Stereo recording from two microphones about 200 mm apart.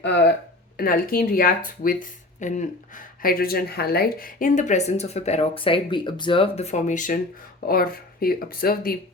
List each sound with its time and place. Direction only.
0.0 s speech: 60° left (ahead or behind)
0.8 s speech: 45° left (ahead or behind)